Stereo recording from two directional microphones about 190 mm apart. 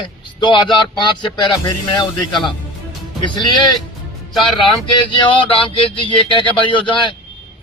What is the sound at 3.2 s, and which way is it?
Speech, 25° left (ahead or behind).